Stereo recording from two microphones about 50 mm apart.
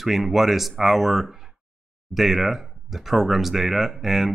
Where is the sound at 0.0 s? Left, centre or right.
Centre.